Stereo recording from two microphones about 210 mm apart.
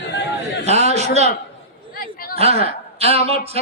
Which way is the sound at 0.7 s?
30° right (ahead or behind).